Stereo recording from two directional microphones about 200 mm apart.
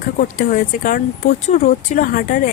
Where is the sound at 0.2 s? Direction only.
45° left (ahead or behind).